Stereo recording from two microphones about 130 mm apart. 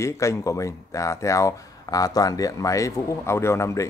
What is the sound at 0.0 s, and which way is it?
Speech, 25° left (ahead or behind).